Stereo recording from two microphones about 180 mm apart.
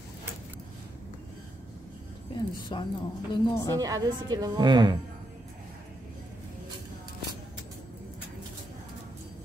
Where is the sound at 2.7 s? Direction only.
25° left (ahead or behind).